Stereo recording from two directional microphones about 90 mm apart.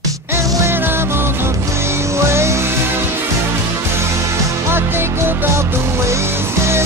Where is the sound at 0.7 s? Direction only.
25° right (ahead or behind).